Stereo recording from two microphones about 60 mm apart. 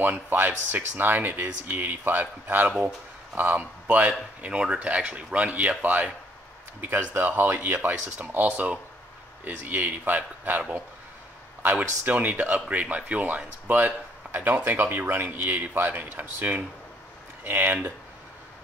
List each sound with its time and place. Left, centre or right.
0.0 s speech: right
4.5 s speech: centre; by 7.5 s right
7.5 s speech: right
12.0 s speech: right